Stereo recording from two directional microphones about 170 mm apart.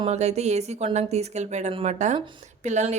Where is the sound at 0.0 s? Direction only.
40° right (ahead or behind).